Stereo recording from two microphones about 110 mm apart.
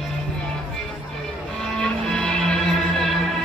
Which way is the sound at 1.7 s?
5° left (ahead or behind).